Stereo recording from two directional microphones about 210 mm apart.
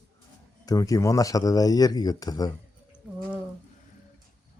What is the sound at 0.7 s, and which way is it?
A man's voice, 15° left (ahead or behind).